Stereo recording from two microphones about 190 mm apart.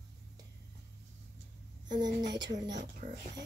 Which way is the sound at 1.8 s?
20° right (ahead or behind).